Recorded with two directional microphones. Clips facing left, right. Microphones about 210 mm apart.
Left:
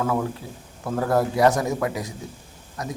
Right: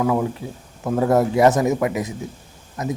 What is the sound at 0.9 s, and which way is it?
A man's voice, 20° right (ahead or behind).